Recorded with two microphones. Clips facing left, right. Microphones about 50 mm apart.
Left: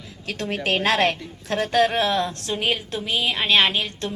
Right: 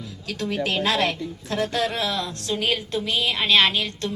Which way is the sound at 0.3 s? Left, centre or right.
Left.